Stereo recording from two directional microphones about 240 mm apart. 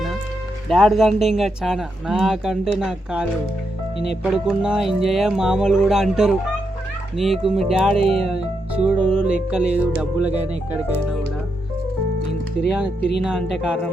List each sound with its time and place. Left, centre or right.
0.7 s speech: centre
13.0 s speech: left
13.2 s speech: centre